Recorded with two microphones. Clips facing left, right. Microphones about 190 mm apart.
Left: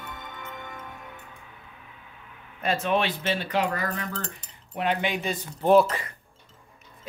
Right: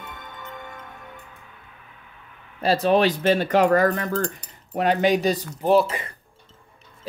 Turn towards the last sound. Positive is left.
turn(degrees=0)  # may be behind; listen again after turning